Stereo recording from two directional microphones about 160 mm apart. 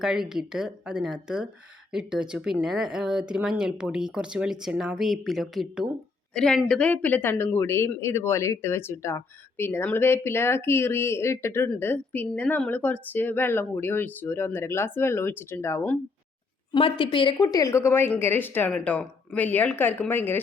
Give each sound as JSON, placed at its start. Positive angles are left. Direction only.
{"t": 0.0, "sound": "speech", "side_deg": -5}
{"t": 16.7, "sound": "speech", "side_deg": 30}